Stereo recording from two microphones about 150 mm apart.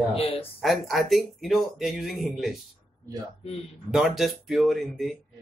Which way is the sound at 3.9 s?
Centre (ahead or behind).